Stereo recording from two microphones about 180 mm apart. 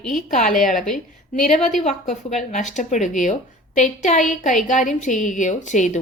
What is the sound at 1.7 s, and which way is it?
A woman's voice, 40° left (ahead or behind).